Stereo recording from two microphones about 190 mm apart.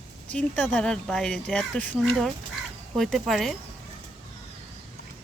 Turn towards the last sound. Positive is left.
turn(degrees=0)  # may be behind; listen again after turning